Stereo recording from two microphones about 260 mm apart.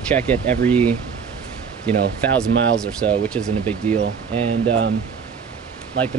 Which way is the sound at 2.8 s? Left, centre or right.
Centre.